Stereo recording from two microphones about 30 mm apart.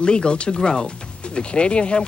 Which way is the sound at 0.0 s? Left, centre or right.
Left.